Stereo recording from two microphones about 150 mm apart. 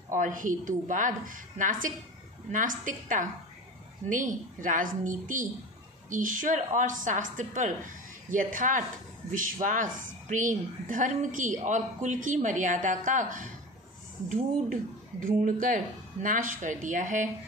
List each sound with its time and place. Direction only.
0.1 s a woman's voice: 60° right (ahead or behind)